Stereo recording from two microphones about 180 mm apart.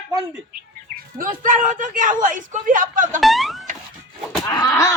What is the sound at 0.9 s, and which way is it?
Speech, 50° right (ahead or behind).